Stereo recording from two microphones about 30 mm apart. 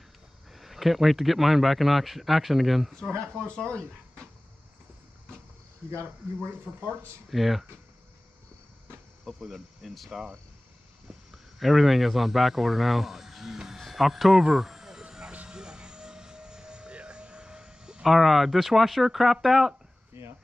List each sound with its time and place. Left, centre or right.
0.5 s speech: centre
3.0 s speech: left
6.6 s speech: right
7.2 s speech: centre
9.2 s speech: centre
11.6 s speech: centre
14.5 s vehicle: centre
15.0 s vehicle: right
15.4 s aircraft: right
18.0 s speech: centre